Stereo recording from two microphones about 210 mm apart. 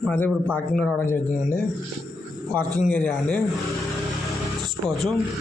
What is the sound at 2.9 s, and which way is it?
Speech, 5° left (ahead or behind).